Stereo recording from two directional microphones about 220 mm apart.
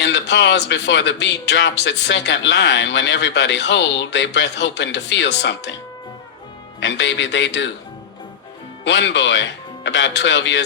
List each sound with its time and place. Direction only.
0.0 s a man's voice: 50° left (ahead or behind)
8.8 s a man's voice: 55° left (ahead or behind)